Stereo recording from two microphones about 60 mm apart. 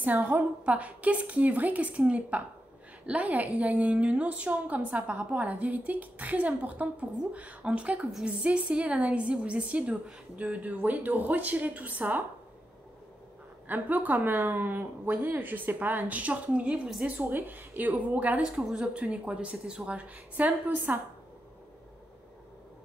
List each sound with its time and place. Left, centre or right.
0.0 s a woman's voice: right
13.7 s a woman's voice: right
17.2 s a woman's voice: right
18.6 s a woman's voice: centre; by 21.0 s right